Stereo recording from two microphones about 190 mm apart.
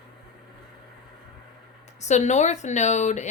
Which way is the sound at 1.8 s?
35° left (ahead or behind).